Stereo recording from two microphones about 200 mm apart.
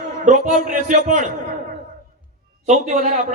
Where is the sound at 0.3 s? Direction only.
35° right (ahead or behind).